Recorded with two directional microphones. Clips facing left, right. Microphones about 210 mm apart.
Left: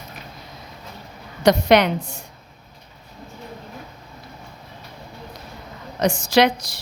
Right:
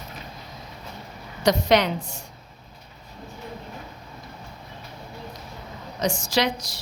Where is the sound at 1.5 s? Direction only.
65° left (ahead or behind).